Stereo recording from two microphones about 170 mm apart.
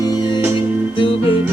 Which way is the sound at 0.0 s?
25° left (ahead or behind).